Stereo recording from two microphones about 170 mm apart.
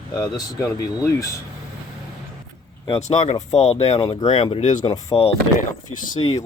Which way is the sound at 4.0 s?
25° left (ahead or behind).